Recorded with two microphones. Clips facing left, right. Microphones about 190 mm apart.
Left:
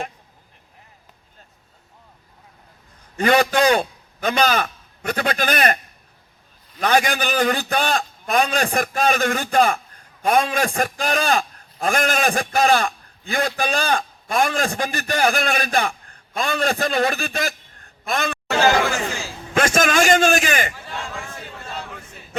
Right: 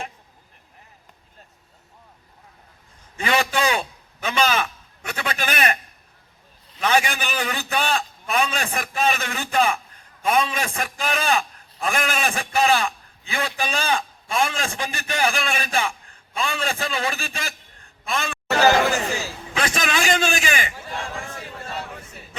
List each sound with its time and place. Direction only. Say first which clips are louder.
3.2 s a man's voice: left 6 dB; 45° left (ahead or behind)
19.5 s a man's voice: left 7 dB; 45° left (ahead or behind)